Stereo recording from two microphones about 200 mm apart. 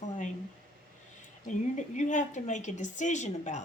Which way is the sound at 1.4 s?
35° left (ahead or behind).